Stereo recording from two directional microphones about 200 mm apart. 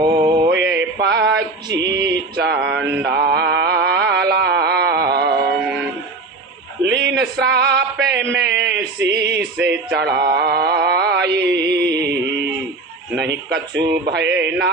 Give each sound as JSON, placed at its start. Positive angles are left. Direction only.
{"t": 0.0, "sound": "music", "side_deg": -20}
{"t": 0.4, "sound": "mantra", "side_deg": -60}
{"t": 1.8, "sound": "a sound", "side_deg": -20}
{"t": 2.0, "sound": "mantra", "side_deg": -55}
{"t": 6.8, "sound": "a sound", "side_deg": -60}
{"t": 9.6, "sound": "mantra", "side_deg": -55}
{"t": 10.2, "sound": "music", "side_deg": -50}
{"t": 13.1, "sound": "mantra", "side_deg": -60}